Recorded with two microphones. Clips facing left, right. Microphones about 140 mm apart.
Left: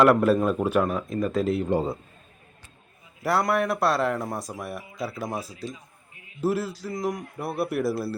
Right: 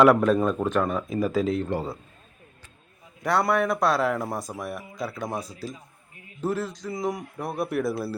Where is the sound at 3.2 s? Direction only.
5° left (ahead or behind).